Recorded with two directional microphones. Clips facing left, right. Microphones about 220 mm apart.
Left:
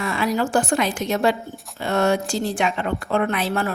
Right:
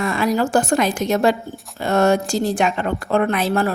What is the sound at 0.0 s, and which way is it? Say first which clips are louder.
A woman's voice: right 3 dB; 45° right (ahead or behind).